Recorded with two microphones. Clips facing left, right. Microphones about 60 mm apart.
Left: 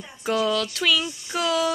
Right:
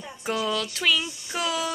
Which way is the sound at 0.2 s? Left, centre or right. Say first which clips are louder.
Left 4 dB; centre.